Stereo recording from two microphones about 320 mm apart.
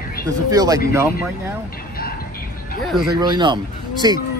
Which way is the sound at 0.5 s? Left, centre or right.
Centre.